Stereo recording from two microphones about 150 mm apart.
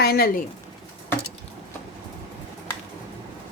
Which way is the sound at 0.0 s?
90° left.